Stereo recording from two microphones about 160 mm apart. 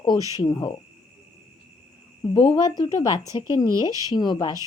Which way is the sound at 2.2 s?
30° left (ahead or behind).